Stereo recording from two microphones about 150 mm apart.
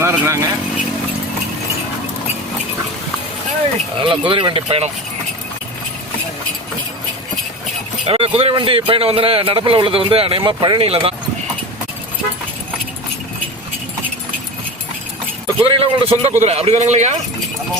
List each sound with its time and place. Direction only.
0.0 s speech: 15° right (ahead or behind)
4.0 s a man's voice: 35° right (ahead or behind)
8.0 s a man's voice: 40° right (ahead or behind)
15.6 s a man's voice: 40° right (ahead or behind)